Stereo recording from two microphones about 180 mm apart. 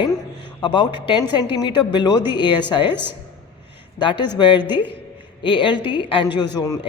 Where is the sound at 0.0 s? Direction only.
25° left (ahead or behind).